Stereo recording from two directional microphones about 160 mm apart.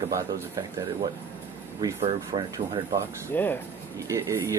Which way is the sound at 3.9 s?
20° right (ahead or behind).